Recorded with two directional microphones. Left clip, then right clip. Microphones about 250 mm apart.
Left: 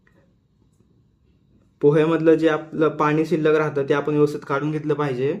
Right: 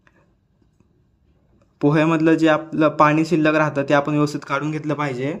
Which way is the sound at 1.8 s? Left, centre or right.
Right.